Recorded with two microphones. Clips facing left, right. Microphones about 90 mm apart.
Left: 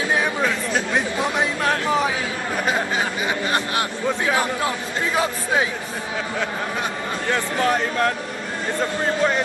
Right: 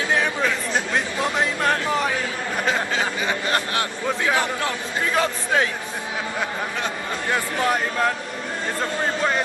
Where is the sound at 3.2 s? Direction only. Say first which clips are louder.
Left 1 dB; 15° left (ahead or behind).